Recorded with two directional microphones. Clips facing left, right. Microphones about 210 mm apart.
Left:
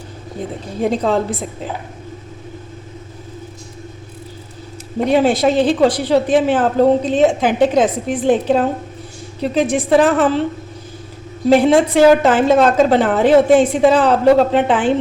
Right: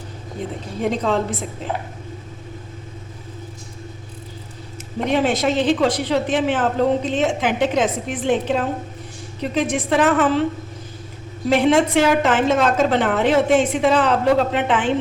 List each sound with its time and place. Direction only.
0.8 s a woman's voice: 35° left (ahead or behind)
5.0 s a woman's voice: 35° left (ahead or behind)
11.4 s a woman's voice: 35° left (ahead or behind)